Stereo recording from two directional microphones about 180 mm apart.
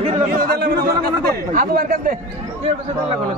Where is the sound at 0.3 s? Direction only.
60° right (ahead or behind).